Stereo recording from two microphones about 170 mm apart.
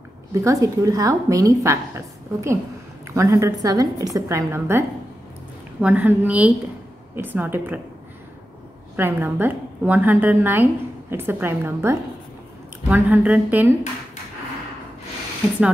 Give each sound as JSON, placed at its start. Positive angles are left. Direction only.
{"t": 0.3, "sound": "a woman's voice", "side_deg": -20}
{"t": 8.9, "sound": "a woman's voice", "side_deg": -10}